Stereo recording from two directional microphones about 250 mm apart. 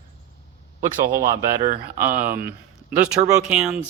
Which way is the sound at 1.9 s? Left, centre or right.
Centre.